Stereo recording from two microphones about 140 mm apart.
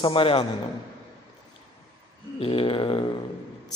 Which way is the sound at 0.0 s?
40° left (ahead or behind).